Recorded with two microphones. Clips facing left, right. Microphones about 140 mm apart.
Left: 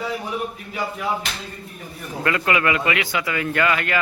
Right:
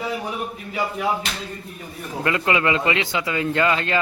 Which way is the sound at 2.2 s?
20° right (ahead or behind).